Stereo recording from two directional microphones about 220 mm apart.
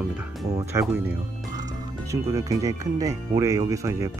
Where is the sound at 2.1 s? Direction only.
15° right (ahead or behind).